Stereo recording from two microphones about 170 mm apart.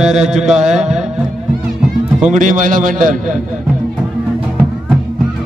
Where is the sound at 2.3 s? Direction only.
50° right (ahead or behind).